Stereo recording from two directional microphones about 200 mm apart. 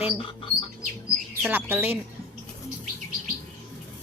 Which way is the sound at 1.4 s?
10° right (ahead or behind).